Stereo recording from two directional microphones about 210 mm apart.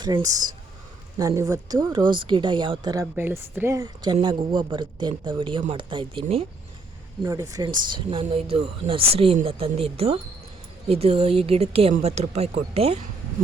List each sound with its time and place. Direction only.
0.0 s speech: 20° right (ahead or behind)